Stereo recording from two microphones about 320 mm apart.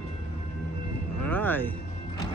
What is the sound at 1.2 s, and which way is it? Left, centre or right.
Music, centre.